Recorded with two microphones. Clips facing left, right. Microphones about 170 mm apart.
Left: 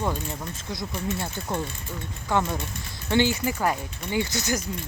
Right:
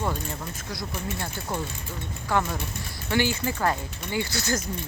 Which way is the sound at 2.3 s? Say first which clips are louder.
Left 1 dB; 20° left (ahead or behind).